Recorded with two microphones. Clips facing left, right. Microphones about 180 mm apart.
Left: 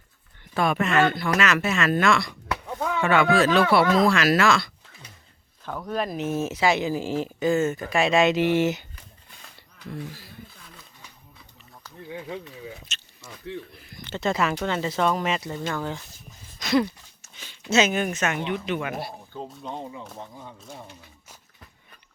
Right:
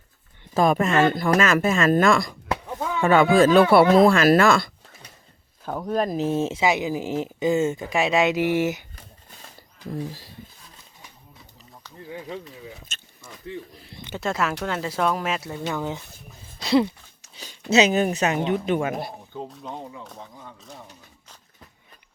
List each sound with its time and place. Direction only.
0.5 s speech: 40° right (ahead or behind)
3.7 s speech: 55° right (ahead or behind)
5.9 s speech: 40° right (ahead or behind); by 8.8 s 10° right (ahead or behind)
9.9 s speech: 35° right (ahead or behind)
13.7 s a sound: 30° right (ahead or behind)
14.2 s speech: 5° right (ahead or behind)
15.7 s speech: 15° right (ahead or behind)
16.6 s a sound: 30° right (ahead or behind)
17.3 s speech: 40° right (ahead or behind)
19.5 s speech: centre (ahead or behind)
20.6 s speech: centre (ahead or behind)